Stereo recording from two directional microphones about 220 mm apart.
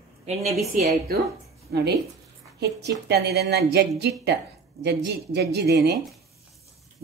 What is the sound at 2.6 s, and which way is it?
Speech, 50° right (ahead or behind).